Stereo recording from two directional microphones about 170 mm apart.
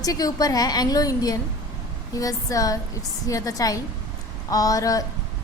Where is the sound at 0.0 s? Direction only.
20° left (ahead or behind).